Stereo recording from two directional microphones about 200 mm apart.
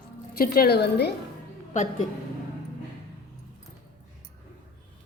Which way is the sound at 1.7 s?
35° left (ahead or behind).